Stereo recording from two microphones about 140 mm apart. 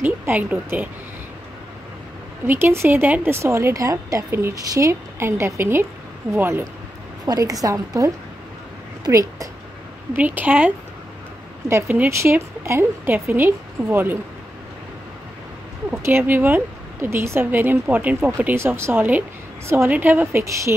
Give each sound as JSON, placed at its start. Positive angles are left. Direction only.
{"t": 0.0, "sound": "a woman's voice", "side_deg": -10}
{"t": 2.4, "sound": "a woman's voice", "side_deg": -15}
{"t": 10.1, "sound": "a woman's voice", "side_deg": -10}
{"t": 11.7, "sound": "a woman's voice", "side_deg": -15}
{"t": 15.9, "sound": "a woman's voice", "side_deg": -15}